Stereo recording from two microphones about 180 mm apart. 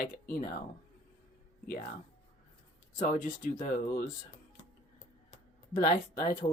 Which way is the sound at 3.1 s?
50° left (ahead or behind).